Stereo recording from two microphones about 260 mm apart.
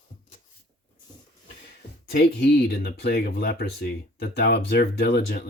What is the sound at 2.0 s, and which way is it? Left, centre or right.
Speech, left.